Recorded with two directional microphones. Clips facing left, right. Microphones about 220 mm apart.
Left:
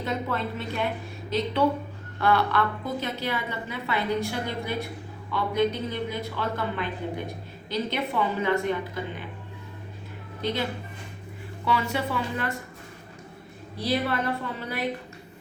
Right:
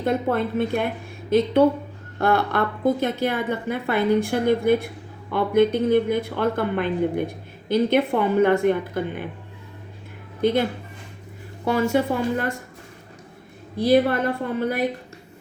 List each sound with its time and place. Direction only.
0.0 s a woman's voice: 50° right (ahead or behind)
10.4 s a woman's voice: 50° right (ahead or behind)
11.6 s a woman's voice: 45° right (ahead or behind)
13.7 s a woman's voice: 50° right (ahead or behind)